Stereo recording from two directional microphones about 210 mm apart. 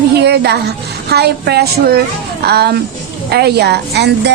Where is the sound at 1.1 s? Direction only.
50° right (ahead or behind).